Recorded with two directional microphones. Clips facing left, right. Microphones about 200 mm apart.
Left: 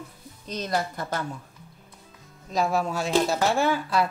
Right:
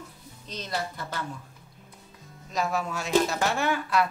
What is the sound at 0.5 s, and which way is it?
Speech, 45° left (ahead or behind).